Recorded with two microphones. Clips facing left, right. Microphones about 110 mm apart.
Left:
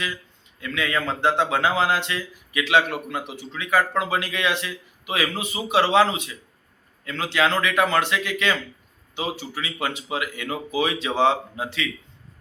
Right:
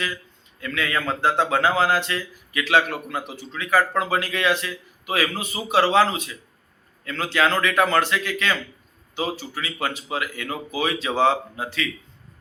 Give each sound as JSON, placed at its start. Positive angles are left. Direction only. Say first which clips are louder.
{"t": 0.6, "sound": "a man's voice", "louder": "even", "side_deg": 20}